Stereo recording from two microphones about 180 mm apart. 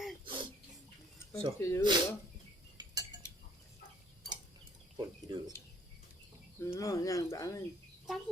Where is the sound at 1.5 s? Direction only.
15° left (ahead or behind).